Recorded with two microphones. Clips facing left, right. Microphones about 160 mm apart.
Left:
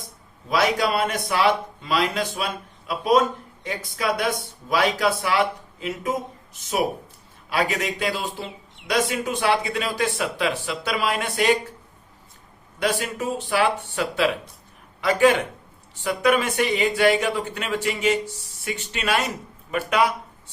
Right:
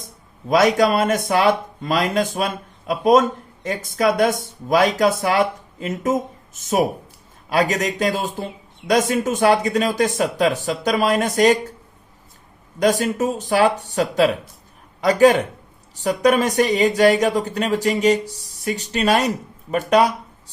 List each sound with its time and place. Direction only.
0.4 s speech: 45° right (ahead or behind)
12.8 s speech: 40° right (ahead or behind)